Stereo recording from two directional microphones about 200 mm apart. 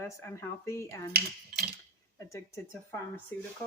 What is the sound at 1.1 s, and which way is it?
Cutlery, 50° right (ahead or behind).